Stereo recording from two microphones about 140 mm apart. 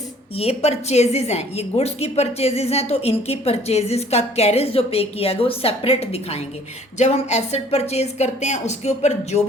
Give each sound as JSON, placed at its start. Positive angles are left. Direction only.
{"t": 0.3, "sound": "a woman's voice", "side_deg": 50}